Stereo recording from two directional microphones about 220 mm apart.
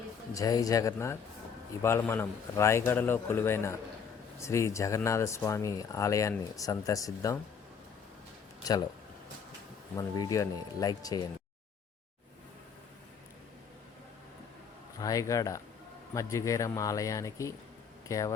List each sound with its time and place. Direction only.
0.3 s speech: 15° left (ahead or behind)
9.9 s speech: 15° left (ahead or behind)
15.0 s speech: 15° left (ahead or behind)